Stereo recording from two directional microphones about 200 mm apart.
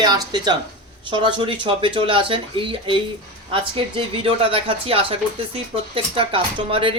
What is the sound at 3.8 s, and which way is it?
Speech, 25° right (ahead or behind).